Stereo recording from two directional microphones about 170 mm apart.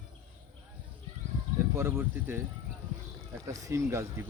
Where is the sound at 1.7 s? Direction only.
15° right (ahead or behind).